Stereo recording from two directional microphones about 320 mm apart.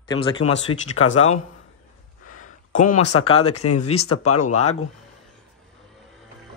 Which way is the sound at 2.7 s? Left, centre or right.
Left.